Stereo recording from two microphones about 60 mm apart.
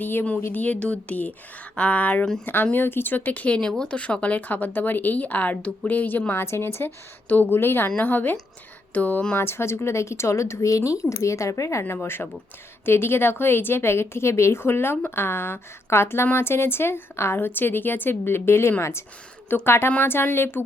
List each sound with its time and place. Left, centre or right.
0.0 s a woman's voice: left
0.5 s a woman's voice: left
3.7 s speech: centre
3.9 s a woman's voice: left
6.4 s a woman's voice: left
9.3 s speech: left
12.0 s a woman's voice: left